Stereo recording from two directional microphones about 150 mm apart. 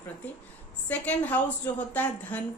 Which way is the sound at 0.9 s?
10° left (ahead or behind).